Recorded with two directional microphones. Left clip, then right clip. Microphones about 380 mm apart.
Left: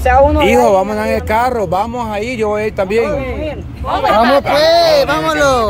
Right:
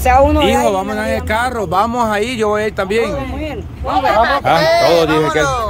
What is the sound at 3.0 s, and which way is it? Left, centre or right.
Speech, right.